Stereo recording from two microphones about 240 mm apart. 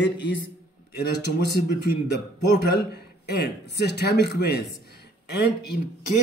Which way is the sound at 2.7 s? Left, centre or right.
Left.